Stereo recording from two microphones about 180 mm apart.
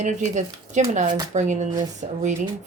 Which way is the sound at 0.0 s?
40° right (ahead or behind).